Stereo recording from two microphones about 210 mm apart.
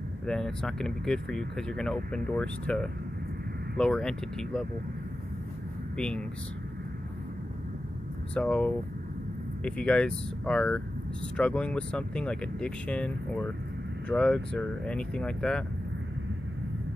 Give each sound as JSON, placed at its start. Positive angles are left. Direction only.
{"t": 0.3, "sound": "speech", "side_deg": 5}
{"t": 5.9, "sound": "speech", "side_deg": 5}
{"t": 8.4, "sound": "speech", "side_deg": 5}